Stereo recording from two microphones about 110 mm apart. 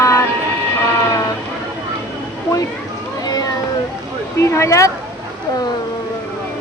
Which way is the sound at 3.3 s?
35° left (ahead or behind).